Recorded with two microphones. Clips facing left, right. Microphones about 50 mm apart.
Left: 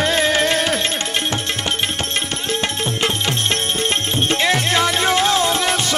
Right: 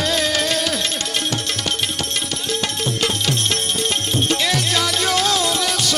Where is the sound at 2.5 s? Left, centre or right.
Left.